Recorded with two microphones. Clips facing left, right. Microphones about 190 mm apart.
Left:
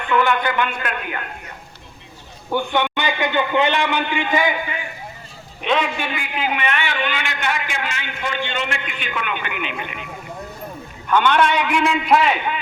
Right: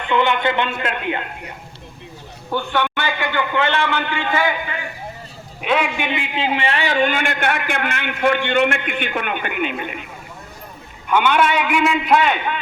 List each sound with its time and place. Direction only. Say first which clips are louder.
0.1 s speech: right 1 dB; 20° right (ahead or behind)
2.5 s a man's voice: left 1 dB; 15° left (ahead or behind)
5.6 s a man's voice: right 1 dB; 10° right (ahead or behind)
6.1 s a man's voice: right 3 dB; 25° right (ahead or behind); by 10.1 s 45° right (ahead or behind)
11.1 s a man's voice: even; 10° right (ahead or behind)